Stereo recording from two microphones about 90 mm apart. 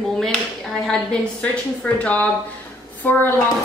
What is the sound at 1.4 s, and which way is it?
A woman's voice, 15° left (ahead or behind).